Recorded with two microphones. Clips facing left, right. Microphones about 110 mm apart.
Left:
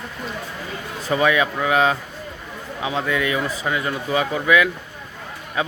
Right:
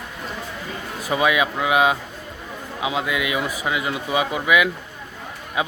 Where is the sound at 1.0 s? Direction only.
10° right (ahead or behind).